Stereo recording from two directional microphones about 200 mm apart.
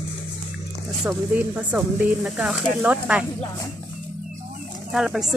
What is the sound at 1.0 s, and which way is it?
Speech, 10° right (ahead or behind).